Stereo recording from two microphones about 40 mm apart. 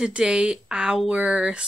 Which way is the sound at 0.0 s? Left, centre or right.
Right.